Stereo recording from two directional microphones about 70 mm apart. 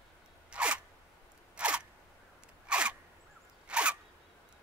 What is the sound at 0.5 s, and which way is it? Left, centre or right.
Zipper, centre.